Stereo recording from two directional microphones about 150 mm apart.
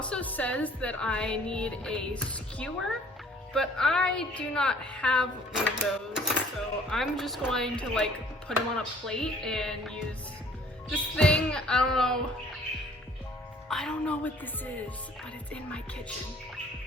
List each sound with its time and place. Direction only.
0.0 s speech: 10° left (ahead or behind)
13.7 s speech: 5° left (ahead or behind)